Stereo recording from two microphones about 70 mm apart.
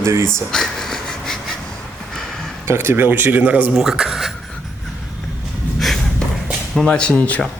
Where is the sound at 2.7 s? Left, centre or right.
Right.